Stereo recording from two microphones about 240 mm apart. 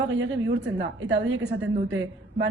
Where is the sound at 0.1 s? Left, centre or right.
Right.